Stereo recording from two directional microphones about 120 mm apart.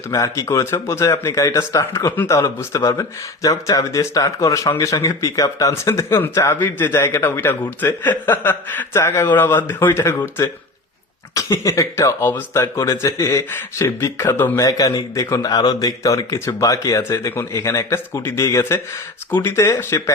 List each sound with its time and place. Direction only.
0.1 s a man's voice: 25° left (ahead or behind)
11.3 s speech: 25° left (ahead or behind)